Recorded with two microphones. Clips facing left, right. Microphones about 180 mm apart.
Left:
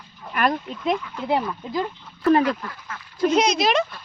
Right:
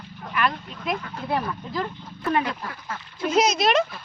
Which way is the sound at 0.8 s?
25° left (ahead or behind).